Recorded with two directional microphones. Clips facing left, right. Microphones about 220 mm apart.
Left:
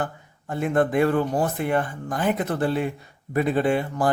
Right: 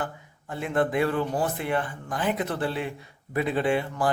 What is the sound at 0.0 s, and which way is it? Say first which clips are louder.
Speech: left 4 dB; 45° left (ahead or behind).